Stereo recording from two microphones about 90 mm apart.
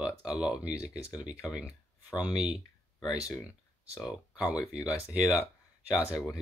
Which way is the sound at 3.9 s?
15° right (ahead or behind).